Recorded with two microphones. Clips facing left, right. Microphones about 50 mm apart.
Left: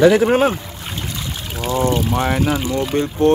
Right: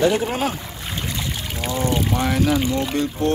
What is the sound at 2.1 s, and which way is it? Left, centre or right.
Speech, centre.